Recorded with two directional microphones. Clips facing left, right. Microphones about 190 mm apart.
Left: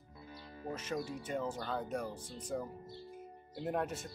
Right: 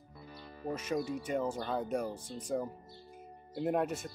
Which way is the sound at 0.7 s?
15° right (ahead or behind).